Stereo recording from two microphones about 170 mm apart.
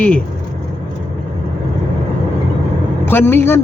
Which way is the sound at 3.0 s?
10° left (ahead or behind).